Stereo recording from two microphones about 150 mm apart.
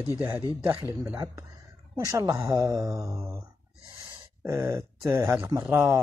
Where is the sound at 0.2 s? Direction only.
15° right (ahead or behind).